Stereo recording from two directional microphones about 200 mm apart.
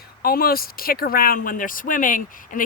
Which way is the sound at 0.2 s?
50° left (ahead or behind).